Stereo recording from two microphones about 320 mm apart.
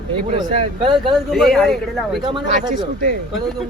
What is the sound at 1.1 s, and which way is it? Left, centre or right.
A man's voice, centre.